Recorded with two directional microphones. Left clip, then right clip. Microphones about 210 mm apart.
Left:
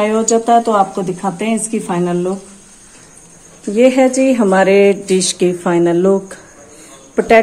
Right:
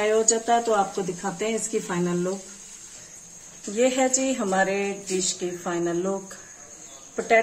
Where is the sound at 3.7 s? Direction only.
20° left (ahead or behind).